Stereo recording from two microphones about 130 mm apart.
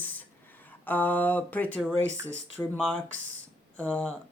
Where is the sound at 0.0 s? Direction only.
15° left (ahead or behind).